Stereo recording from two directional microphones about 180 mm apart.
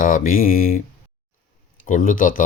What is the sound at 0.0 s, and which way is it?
Speech, 50° left (ahead or behind).